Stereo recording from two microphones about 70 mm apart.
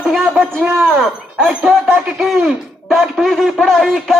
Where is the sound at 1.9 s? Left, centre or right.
Centre.